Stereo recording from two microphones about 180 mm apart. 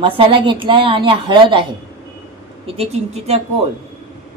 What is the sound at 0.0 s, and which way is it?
A woman's voice, 30° right (ahead or behind).